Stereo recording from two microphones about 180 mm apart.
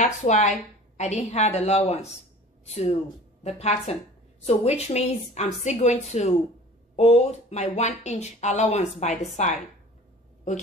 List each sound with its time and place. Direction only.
0.0 s speech: 40° left (ahead or behind)